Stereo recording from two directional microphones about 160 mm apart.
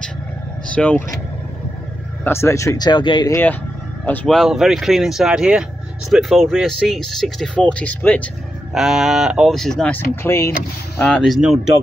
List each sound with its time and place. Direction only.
0.7 s speech: 5° left (ahead or behind)
2.2 s speech: 15° left (ahead or behind)
4.0 s speech: 10° left (ahead or behind)
8.7 s speech: 5° right (ahead or behind); by 10.5 s 15° left (ahead or behind)
11.0 s speech: 5° left (ahead or behind)